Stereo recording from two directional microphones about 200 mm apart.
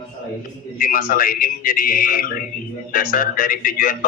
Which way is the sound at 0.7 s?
45° left (ahead or behind).